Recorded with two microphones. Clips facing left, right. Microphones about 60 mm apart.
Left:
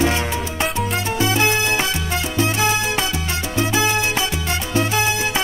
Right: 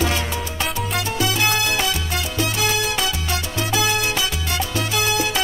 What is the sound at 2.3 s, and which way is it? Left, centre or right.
Salsa music, left.